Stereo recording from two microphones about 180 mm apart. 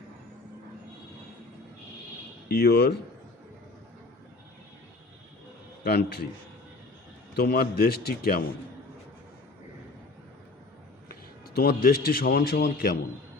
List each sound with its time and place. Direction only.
2.5 s a man's voice: 60° left (ahead or behind)
5.8 s a man's voice: 65° left (ahead or behind)
7.3 s a man's voice: 60° left (ahead or behind)
11.1 s a man's voice: 60° left (ahead or behind)